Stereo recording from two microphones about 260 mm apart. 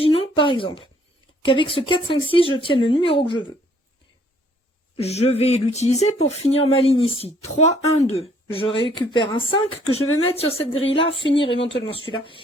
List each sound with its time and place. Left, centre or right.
0.0 s a sound: left
1.5 s speech: centre
4.9 s speech: left
10.8 s speech: left
11.3 s speech: centre